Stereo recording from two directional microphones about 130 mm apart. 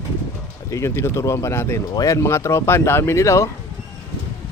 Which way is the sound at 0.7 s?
20° left (ahead or behind).